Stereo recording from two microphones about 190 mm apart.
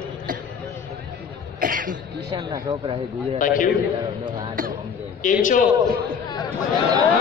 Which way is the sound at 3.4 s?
45° left (ahead or behind).